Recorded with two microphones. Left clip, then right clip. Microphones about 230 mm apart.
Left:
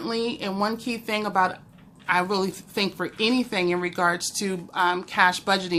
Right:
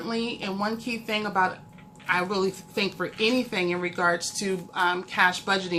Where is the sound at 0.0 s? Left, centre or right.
Left.